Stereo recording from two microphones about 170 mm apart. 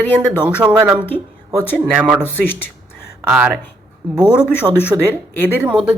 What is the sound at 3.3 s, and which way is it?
Speech, 5° right (ahead or behind).